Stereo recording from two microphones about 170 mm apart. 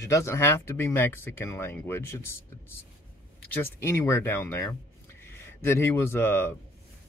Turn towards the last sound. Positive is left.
turn(degrees=15)  # may be behind; listen again after turning